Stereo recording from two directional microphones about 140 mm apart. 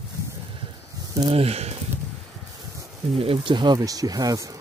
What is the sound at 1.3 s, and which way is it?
Speech, 45° right (ahead or behind).